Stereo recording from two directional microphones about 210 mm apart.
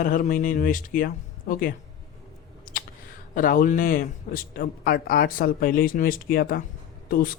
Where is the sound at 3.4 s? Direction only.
40° left (ahead or behind).